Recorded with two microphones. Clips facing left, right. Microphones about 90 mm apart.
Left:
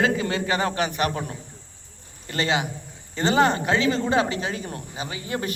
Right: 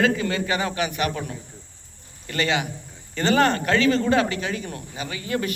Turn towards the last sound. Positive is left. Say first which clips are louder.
# right 2 dB
turn(degrees=25)  # may be behind; listen again after turning